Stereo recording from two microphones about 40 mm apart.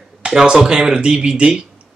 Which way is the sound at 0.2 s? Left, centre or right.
Right.